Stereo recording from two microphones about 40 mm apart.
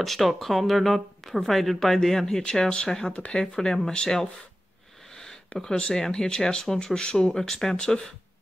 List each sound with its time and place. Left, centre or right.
0.0 s speech: centre
3.1 s speech: left
3.3 s speech: centre
5.1 s a sound: centre
5.6 s speech: centre